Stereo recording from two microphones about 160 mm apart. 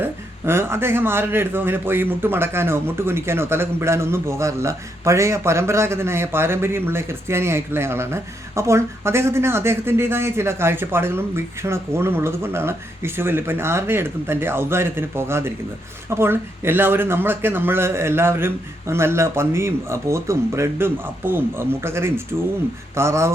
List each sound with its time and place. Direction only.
0.0 s speech: 15° right (ahead or behind)